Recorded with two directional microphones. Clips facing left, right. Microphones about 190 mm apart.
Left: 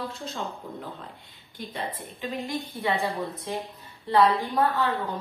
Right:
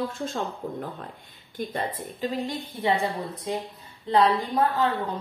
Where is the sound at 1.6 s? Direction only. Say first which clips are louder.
Right 4 dB; 45° right (ahead or behind).